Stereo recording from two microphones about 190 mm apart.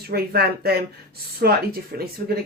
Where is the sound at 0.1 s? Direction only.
55° right (ahead or behind).